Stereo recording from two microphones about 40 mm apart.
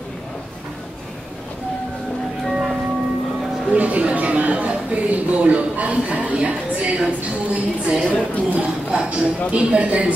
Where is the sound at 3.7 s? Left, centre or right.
Right.